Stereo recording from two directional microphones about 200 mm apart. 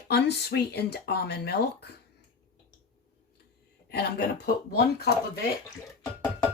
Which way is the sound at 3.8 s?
50° left (ahead or behind).